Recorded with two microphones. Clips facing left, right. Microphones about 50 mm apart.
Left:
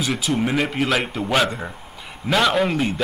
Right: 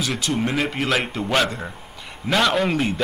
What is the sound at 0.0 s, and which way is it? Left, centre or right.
A man's voice, centre.